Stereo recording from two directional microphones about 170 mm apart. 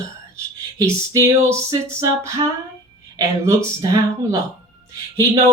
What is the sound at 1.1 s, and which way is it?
Speech, 20° right (ahead or behind).